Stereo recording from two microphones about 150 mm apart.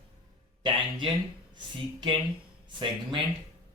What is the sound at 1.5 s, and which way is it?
Speech, 30° right (ahead or behind).